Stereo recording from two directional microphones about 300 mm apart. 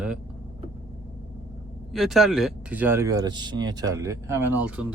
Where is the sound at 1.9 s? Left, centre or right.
Centre.